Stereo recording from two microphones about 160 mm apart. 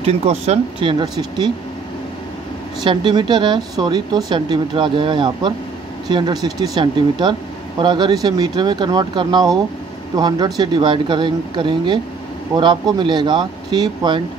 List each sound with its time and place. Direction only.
0.0 s speech: 40° right (ahead or behind)
2.8 s speech: 30° right (ahead or behind)